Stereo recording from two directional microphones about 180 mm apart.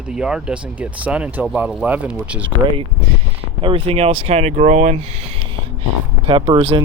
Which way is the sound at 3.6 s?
35° right (ahead or behind).